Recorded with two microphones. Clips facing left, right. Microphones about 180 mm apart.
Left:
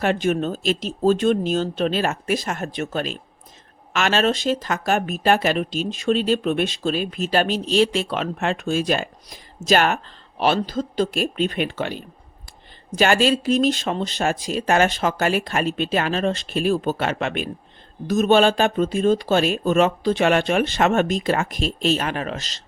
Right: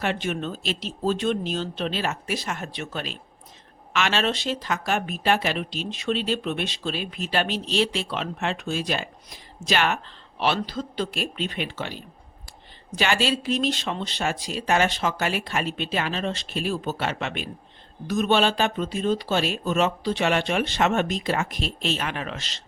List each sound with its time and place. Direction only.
0.0 s speech: 45° left (ahead or behind)
13.0 s speech: 45° left (ahead or behind)